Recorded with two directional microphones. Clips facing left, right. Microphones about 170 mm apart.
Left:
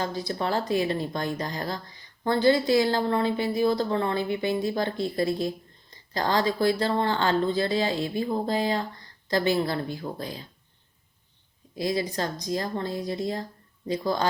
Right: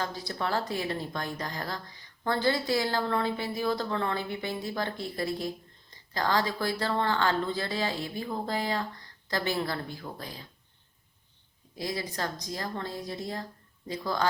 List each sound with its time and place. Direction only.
0.0 s speech: 20° left (ahead or behind)
6.1 s speech: 20° left (ahead or behind)
11.8 s speech: 20° left (ahead or behind)